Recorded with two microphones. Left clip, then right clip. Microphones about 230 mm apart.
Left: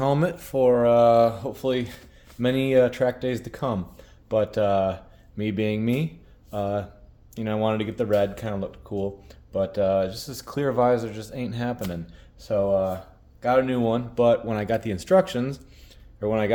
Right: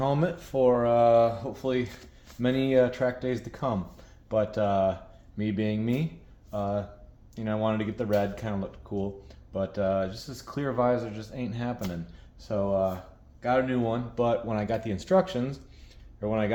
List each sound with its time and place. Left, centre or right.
0.0 s speech: left